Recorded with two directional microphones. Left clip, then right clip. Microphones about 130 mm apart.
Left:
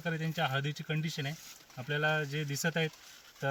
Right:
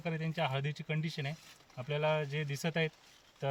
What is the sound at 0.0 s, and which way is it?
Speech, 35° right (ahead or behind).